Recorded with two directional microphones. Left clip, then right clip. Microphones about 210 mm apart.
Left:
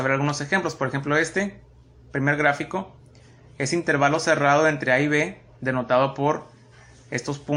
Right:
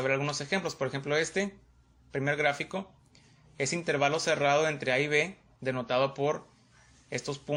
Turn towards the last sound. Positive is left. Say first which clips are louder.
# left 6 dB
turn(degrees=-25)  # may be behind; listen again after turning